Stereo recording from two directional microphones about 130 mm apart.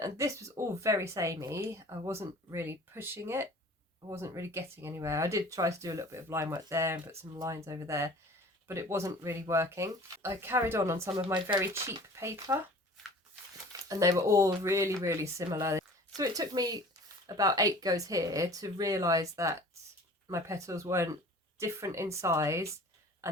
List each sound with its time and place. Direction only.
0.0 s speech: 25° right (ahead or behind)
13.8 s speech: 25° right (ahead or behind)